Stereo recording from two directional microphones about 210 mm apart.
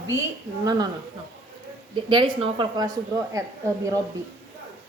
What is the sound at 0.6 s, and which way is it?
Speech, 20° right (ahead or behind).